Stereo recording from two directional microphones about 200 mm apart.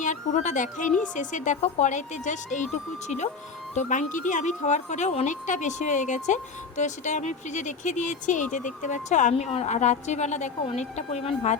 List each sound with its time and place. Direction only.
0.0 s speech: 40° left (ahead or behind)
3.8 s speech: 40° left (ahead or behind)